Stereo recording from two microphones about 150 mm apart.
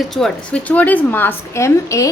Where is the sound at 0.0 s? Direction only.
Centre (ahead or behind).